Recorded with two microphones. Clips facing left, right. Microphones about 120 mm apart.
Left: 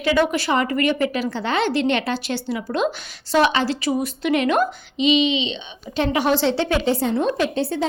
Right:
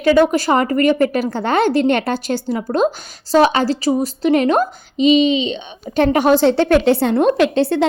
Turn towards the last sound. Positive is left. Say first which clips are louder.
# right 7 dB
turn(degrees=-85)